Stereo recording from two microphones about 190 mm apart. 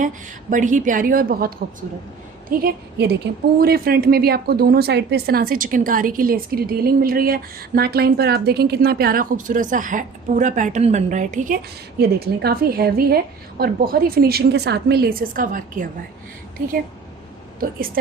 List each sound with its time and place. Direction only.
0.5 s speech: 40° right (ahead or behind)
17.6 s speech: 50° right (ahead or behind)